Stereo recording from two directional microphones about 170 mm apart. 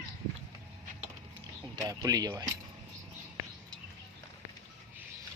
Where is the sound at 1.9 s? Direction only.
20° right (ahead or behind).